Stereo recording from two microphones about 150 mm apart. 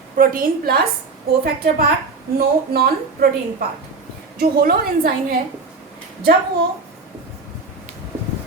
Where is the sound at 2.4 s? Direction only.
90° right.